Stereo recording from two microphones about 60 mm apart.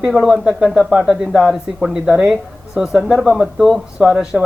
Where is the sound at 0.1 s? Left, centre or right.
Centre.